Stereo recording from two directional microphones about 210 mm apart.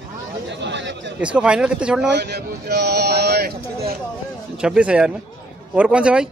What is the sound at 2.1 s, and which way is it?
Speech, 50° right (ahead or behind).